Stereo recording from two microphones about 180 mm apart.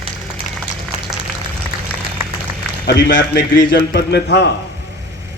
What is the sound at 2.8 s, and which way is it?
Speech, 90° left.